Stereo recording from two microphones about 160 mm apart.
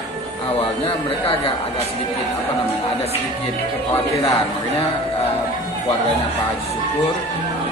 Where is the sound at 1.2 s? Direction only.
35° left (ahead or behind).